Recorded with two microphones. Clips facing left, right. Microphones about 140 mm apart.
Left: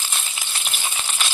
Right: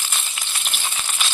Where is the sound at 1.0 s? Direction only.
5° left (ahead or behind).